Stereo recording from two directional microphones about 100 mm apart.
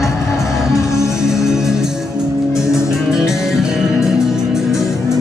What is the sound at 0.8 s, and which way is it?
Music, 30° left (ahead or behind).